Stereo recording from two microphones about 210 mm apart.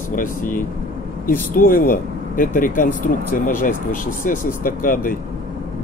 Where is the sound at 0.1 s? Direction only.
40° left (ahead or behind).